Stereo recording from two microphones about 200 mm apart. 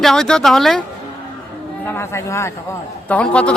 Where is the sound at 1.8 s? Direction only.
15° left (ahead or behind).